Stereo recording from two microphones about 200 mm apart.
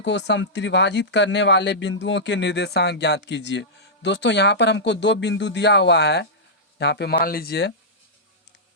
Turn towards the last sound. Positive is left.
turn(degrees=50)  # may be behind; listen again after turning